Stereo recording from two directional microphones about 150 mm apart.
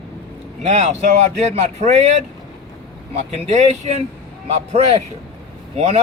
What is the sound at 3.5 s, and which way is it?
Speech, 45° right (ahead or behind).